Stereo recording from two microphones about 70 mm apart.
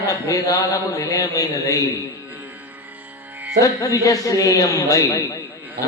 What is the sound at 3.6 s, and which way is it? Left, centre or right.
A man's voice, left.